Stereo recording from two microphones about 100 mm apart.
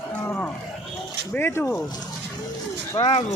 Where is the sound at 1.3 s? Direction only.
25° left (ahead or behind).